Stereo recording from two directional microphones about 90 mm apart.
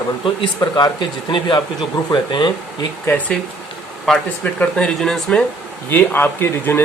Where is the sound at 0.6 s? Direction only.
50° left (ahead or behind).